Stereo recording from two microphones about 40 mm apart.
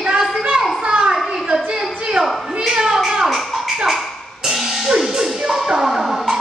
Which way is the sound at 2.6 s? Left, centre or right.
Centre.